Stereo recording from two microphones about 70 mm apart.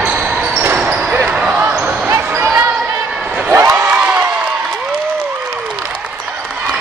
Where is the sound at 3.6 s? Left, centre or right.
Right.